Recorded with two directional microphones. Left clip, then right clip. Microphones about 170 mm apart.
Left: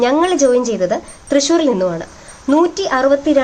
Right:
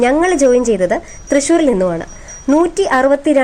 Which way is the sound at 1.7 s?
35° right (ahead or behind).